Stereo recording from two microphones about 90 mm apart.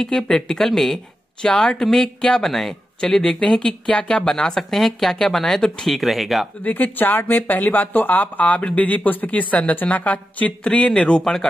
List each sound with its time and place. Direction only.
0.0 s speech: 5° left (ahead or behind)
6.6 s speech: 20° left (ahead or behind)